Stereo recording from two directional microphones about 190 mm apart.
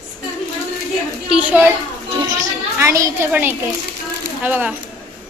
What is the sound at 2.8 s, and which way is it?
A child's voice, 15° right (ahead or behind).